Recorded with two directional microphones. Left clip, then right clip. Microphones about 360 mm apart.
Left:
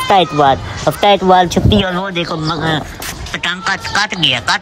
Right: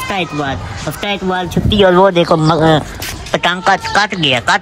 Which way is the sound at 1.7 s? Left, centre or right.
Centre.